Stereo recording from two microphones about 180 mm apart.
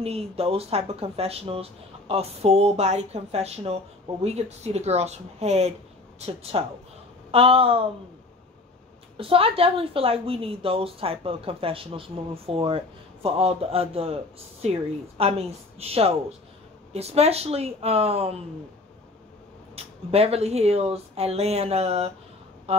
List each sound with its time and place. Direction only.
0.0 s speech: 35° right (ahead or behind)
9.1 s speech: 30° right (ahead or behind)
19.7 s speech: 35° right (ahead or behind)
22.7 s a sound: 35° right (ahead or behind)